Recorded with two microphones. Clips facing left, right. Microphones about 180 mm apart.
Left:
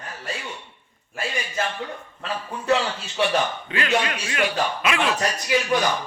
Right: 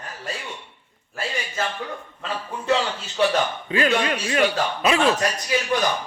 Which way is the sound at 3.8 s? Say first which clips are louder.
Right 2 dB; 35° right (ahead or behind).